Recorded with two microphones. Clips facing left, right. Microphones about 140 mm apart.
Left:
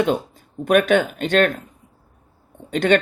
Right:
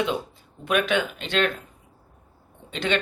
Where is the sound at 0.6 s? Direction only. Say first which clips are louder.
Left 7 dB; 50° left (ahead or behind).